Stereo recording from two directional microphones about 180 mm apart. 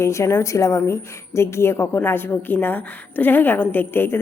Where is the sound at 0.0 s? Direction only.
15° left (ahead or behind).